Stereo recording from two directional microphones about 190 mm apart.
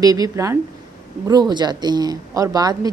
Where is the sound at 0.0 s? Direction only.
20° right (ahead or behind).